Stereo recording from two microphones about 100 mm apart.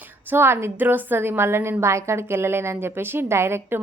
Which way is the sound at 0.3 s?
25° right (ahead or behind).